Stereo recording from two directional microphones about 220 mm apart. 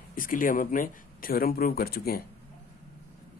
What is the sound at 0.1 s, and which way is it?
Speech, 40° left (ahead or behind).